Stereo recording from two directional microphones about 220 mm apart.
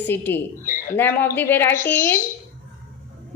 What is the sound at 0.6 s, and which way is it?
Speech, 40° left (ahead or behind).